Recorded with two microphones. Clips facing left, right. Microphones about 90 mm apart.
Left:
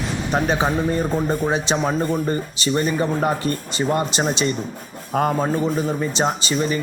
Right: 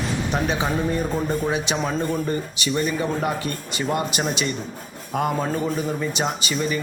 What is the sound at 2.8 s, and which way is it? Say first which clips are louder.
Speech: left 3 dB; 35° left (ahead or behind).